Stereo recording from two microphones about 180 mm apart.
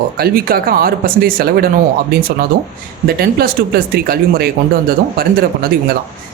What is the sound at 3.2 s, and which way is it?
Speech, 60° right (ahead or behind).